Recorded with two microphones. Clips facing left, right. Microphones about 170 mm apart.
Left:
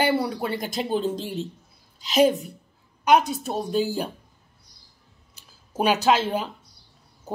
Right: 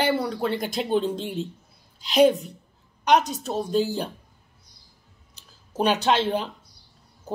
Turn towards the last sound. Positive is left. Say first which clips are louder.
# left 1 dB
turn(degrees=5)  # may be behind; listen again after turning